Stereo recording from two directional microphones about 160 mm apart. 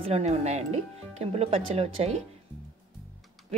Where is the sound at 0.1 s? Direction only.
45° right (ahead or behind).